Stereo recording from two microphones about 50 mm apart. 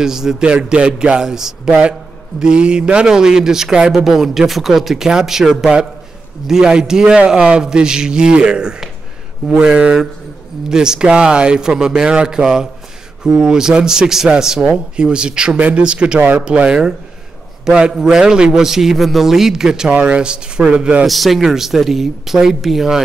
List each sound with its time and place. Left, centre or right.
0.0 s speech: centre
0.5 s speech: right
1.7 s speech: right
19.9 s speech: right
21.1 s speech: centre